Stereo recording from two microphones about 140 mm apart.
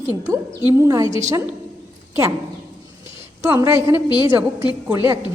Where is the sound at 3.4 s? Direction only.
15° right (ahead or behind).